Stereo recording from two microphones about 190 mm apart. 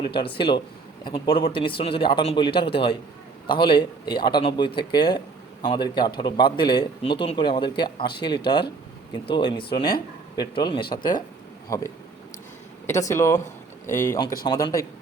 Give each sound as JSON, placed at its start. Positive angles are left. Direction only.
{"t": 0.0, "sound": "speech", "side_deg": 25}
{"t": 12.9, "sound": "speech", "side_deg": 15}